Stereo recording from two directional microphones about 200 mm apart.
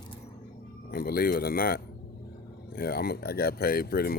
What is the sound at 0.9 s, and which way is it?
Speech, 50° left (ahead or behind).